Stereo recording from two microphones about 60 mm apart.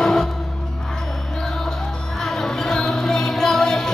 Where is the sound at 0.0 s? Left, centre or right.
Centre.